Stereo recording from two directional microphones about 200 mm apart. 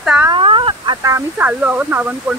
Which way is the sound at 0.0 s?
5° right (ahead or behind).